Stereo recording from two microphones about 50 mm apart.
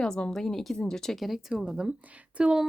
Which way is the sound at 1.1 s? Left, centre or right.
Centre.